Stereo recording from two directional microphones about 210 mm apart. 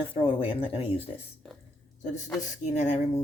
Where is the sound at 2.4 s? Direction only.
35° left (ahead or behind).